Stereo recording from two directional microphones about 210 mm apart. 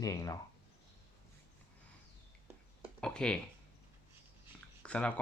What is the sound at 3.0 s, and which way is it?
Speech, 5° left (ahead or behind).